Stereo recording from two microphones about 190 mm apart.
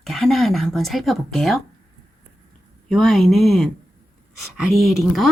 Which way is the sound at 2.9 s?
Centre (ahead or behind).